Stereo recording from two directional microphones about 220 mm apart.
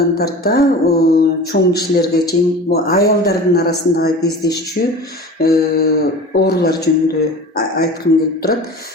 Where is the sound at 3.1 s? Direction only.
45° left (ahead or behind).